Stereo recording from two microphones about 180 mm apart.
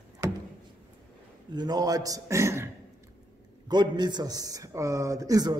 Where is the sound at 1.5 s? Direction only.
25° right (ahead or behind).